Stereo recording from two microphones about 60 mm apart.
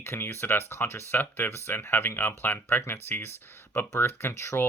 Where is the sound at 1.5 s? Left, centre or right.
Left.